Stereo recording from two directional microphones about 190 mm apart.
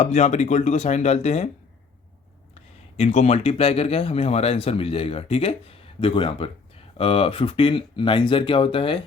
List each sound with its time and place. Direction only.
0.0 s speech: 35° left (ahead or behind)
3.0 s speech: 35° left (ahead or behind)